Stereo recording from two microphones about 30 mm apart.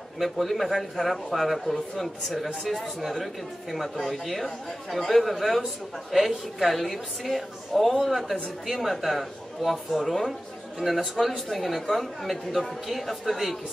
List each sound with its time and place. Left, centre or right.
0.2 s a man's voice: centre
4.0 s a man's voice: centre
10.8 s a man's voice: left
11.2 s a man's voice: centre